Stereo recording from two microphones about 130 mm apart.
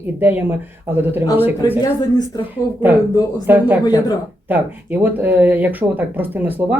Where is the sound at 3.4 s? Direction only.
15° right (ahead or behind).